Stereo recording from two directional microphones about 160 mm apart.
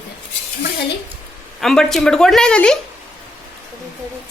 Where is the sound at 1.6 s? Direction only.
Centre (ahead or behind).